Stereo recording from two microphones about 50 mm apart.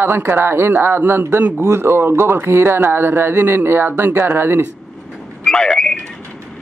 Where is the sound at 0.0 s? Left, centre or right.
Right.